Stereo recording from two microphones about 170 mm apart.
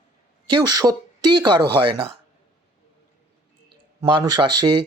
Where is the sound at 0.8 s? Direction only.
25° right (ahead or behind).